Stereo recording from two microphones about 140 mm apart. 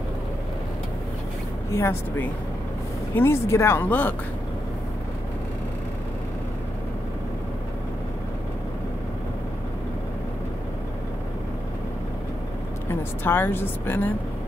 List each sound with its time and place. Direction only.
1.7 s speech: 20° left (ahead or behind)
13.2 s speech: 15° left (ahead or behind)